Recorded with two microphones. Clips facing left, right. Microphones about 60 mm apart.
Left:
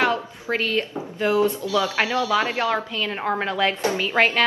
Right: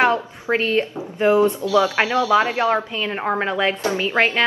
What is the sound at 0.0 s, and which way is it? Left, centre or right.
A woman's voice, right.